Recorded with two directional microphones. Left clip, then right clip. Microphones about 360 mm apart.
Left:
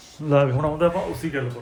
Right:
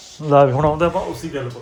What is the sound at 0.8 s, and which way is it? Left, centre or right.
Speech, right.